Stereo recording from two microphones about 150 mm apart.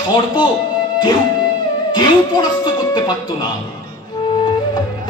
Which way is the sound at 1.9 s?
30° left (ahead or behind).